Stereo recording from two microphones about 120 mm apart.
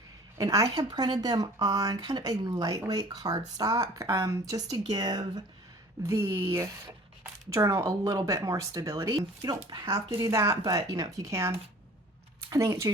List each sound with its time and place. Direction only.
0.3 s speech: 30° right (ahead or behind)
6.0 s speech: 25° right (ahead or behind)